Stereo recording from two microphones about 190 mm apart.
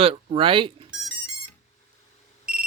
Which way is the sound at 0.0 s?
30° right (ahead or behind).